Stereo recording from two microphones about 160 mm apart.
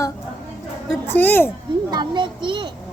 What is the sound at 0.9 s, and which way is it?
Speech, 10° left (ahead or behind).